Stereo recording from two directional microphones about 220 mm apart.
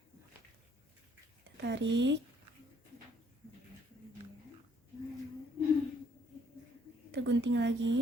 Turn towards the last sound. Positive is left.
turn(degrees=-55)  # may be behind; listen again after turning